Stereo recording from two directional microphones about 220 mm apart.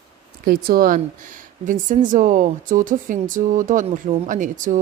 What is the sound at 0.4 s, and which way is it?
A woman's voice, 45° right (ahead or behind).